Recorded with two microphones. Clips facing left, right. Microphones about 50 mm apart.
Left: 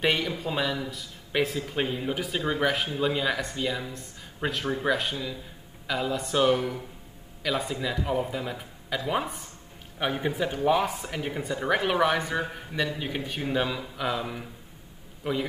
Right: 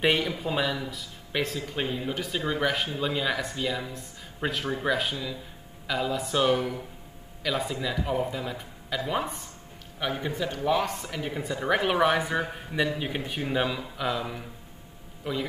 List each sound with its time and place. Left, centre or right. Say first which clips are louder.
0.0 s speech: right 1 dB; centre
9.9 s a man's voice: left 2 dB; centre
15.2 s a man's voice: left 2 dB; centre